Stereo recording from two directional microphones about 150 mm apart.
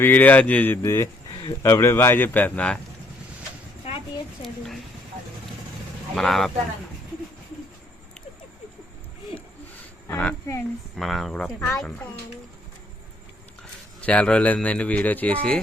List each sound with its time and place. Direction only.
0.0 s speech: 10° left (ahead or behind)
1.3 s a sound: 30° left (ahead or behind)
1.6 s speech: 15° left (ahead or behind)
4.4 s speech: centre (ahead or behind)
6.1 s speech: centre (ahead or behind)
10.1 s speech: 10° left (ahead or behind)
10.9 s speech: centre (ahead or behind)
14.0 s speech: 10° left (ahead or behind)